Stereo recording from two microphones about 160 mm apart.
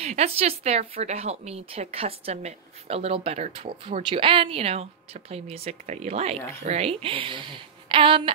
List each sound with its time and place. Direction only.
0.0 s speech: 40° right (ahead or behind)